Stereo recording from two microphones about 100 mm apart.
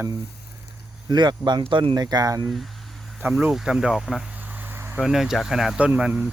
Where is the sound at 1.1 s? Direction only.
45° right (ahead or behind).